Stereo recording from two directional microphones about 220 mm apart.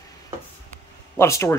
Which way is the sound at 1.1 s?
10° left (ahead or behind).